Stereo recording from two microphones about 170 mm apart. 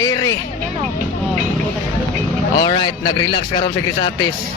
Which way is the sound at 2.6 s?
25° left (ahead or behind).